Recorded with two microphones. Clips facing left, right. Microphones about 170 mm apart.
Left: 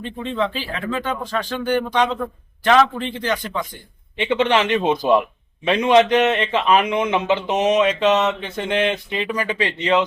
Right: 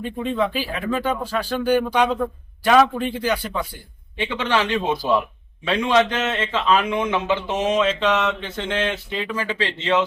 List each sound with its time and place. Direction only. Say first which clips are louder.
0.0 s speech: right 1 dB; 10° right (ahead or behind)
4.3 s a man's voice: left 5 dB; 20° left (ahead or behind)